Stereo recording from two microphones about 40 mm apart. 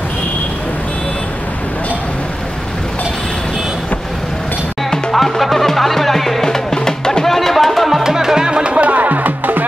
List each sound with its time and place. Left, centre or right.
4.9 s music: centre
8.0 s music: centre; by 9.7 s right